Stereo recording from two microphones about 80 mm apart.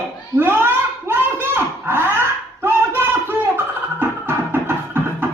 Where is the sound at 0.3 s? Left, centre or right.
Right.